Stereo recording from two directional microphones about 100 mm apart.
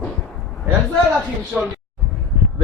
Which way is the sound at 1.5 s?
5° right (ahead or behind).